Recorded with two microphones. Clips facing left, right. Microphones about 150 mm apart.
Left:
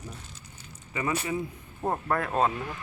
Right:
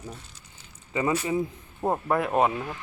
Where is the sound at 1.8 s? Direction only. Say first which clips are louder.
Right 3 dB; 15° right (ahead or behind).